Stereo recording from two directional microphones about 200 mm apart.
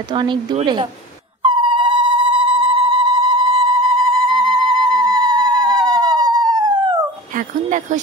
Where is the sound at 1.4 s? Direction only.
25° right (ahead or behind).